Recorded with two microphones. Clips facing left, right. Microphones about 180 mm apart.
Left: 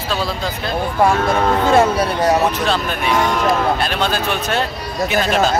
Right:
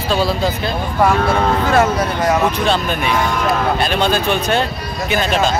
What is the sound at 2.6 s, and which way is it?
Speech, centre (ahead or behind).